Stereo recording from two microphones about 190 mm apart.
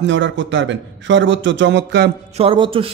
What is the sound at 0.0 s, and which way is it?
A man's voice, 75° right (ahead or behind).